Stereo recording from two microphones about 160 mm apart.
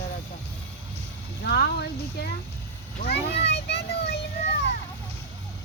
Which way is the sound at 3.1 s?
90° left.